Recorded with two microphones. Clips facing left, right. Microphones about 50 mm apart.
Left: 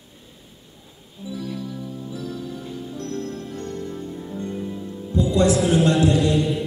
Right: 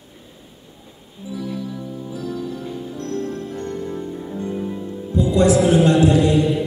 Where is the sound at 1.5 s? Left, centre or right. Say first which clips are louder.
Right 3 dB; centre.